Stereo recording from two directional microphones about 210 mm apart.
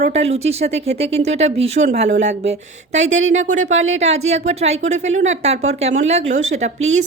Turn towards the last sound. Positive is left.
turn(degrees=-35)  # may be behind; listen again after turning